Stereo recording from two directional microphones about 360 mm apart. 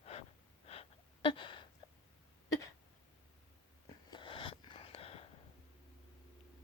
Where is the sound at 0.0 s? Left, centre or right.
Centre.